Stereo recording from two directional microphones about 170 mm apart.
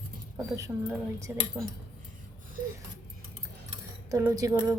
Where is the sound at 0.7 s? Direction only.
15° right (ahead or behind).